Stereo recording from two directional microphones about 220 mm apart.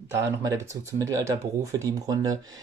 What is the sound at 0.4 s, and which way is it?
Speech, 15° right (ahead or behind).